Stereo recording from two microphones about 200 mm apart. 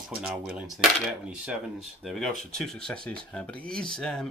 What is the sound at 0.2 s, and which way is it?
Speech, 5° right (ahead or behind).